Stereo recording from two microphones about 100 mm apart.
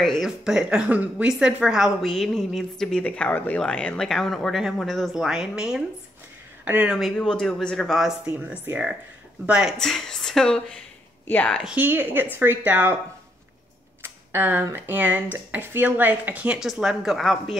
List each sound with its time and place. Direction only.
0.2 s a woman's voice: 5° right (ahead or behind)
6.6 s speech: 15° right (ahead or behind)
7.0 s a woman's voice: centre (ahead or behind)
8.3 s speech: 10° right (ahead or behind)
9.8 s a woman's voice: 5° left (ahead or behind)
11.7 s a woman's voice: 20° right (ahead or behind)
14.0 s speech: 20° right (ahead or behind)
16.5 s a woman's voice: 5° right (ahead or behind)